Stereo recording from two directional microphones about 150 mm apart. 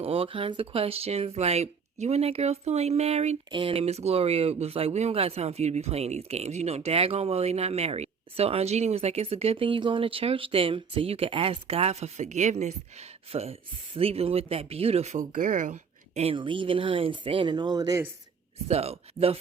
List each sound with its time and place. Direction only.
0.0 s speech: 40° right (ahead or behind); by 18.0 s 25° right (ahead or behind)
18.7 s speech: 45° right (ahead or behind)